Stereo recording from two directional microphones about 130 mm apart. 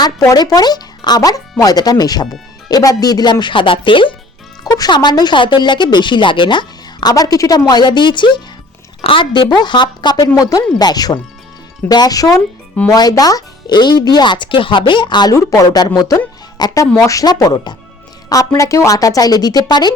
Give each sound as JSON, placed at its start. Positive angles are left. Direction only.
{"t": 0.0, "sound": "speech", "side_deg": 30}
{"t": 16.8, "sound": "speech", "side_deg": 15}